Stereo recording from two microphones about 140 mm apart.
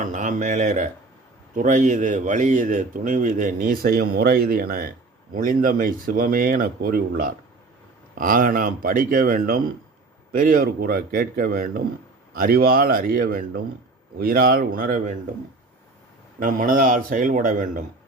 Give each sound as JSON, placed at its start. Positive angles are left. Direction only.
{"t": 0.0, "sound": "speech", "side_deg": -65}
{"t": 8.2, "sound": "speech", "side_deg": -80}
{"t": 16.4, "sound": "a man's voice", "side_deg": -75}